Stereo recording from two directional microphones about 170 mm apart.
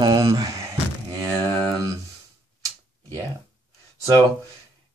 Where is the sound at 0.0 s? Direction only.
20° right (ahead or behind).